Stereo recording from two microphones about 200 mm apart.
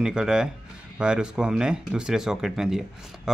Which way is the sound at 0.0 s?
5° right (ahead or behind).